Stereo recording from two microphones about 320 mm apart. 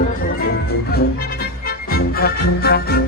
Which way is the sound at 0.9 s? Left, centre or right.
Left.